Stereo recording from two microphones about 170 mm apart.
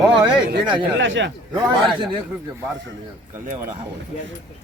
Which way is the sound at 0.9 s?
90° right.